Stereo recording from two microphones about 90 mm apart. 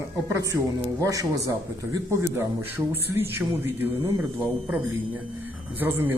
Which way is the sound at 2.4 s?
25° right (ahead or behind).